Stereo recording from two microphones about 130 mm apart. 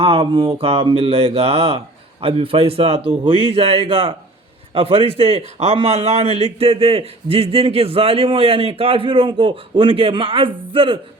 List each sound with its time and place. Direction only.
0.0 s a man's voice: 45° right (ahead or behind)